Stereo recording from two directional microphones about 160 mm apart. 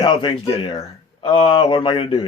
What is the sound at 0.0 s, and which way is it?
Speech, 30° left (ahead or behind).